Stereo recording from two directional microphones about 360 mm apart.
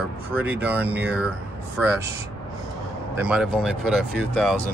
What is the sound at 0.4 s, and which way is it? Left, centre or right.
Speech, centre.